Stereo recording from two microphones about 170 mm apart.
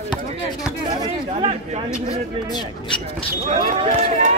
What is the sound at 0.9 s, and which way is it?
Chatter, 20° right (ahead or behind).